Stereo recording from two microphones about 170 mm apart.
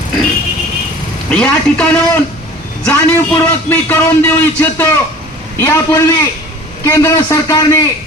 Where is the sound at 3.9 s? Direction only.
10° left (ahead or behind).